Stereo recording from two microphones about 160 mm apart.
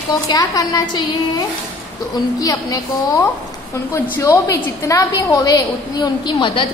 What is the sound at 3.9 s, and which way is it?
A woman's voice, 20° left (ahead or behind).